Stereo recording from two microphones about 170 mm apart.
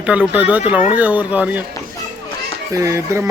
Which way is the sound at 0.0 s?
10° right (ahead or behind).